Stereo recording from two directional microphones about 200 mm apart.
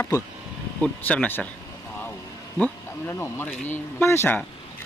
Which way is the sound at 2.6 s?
15° left (ahead or behind).